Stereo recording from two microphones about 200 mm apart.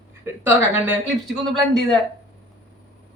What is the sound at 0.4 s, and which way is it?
Speech, 10° right (ahead or behind).